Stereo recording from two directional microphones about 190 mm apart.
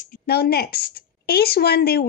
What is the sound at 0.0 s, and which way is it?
A woman's voice, 50° left (ahead or behind).